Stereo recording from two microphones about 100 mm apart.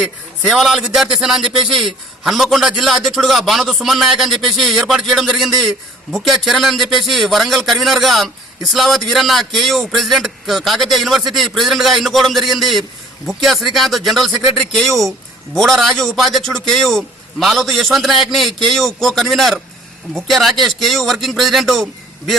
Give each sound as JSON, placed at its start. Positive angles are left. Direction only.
{"t": 0.0, "sound": "a man's voice", "side_deg": 0}